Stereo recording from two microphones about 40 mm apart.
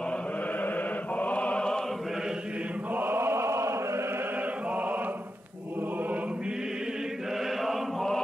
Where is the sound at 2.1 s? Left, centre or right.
Centre.